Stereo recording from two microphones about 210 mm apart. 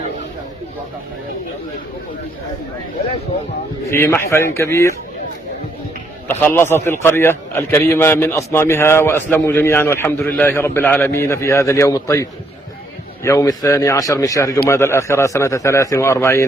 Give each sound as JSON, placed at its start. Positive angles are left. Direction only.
{"t": 3.8, "sound": "a man's voice", "side_deg": 10}
{"t": 6.2, "sound": "a man's voice", "side_deg": 10}